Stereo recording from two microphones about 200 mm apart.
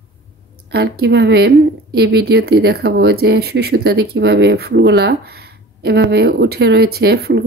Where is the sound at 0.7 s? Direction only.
55° right (ahead or behind).